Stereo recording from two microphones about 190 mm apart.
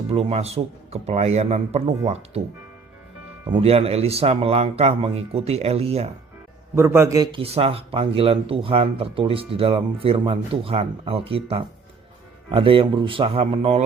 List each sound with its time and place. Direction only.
0.1 s speech: 30° right (ahead or behind)
3.5 s speech: 30° right (ahead or behind)
6.7 s speech: 15° right (ahead or behind); by 13.8 s 30° right (ahead or behind)